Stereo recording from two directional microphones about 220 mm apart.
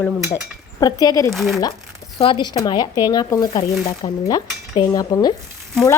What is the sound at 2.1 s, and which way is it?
Speech, 20° left (ahead or behind).